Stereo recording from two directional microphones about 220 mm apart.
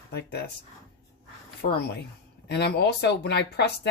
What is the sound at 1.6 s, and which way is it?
Speech, 45° left (ahead or behind).